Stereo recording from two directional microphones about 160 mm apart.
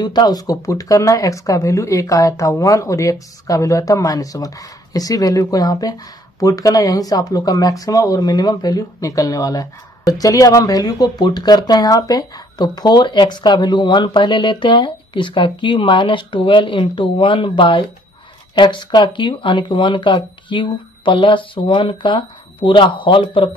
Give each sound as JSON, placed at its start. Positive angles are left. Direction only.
{"t": 0.0, "sound": "speech", "side_deg": 25}